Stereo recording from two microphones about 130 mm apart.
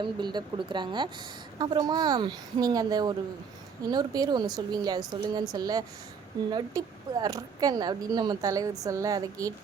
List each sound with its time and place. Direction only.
0.0 s a woman's voice: 35° right (ahead or behind)